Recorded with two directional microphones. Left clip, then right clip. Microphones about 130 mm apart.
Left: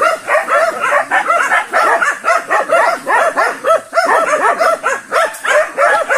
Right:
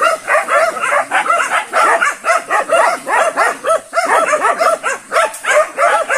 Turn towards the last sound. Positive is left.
turn(degrees=-20)  # may be behind; listen again after turning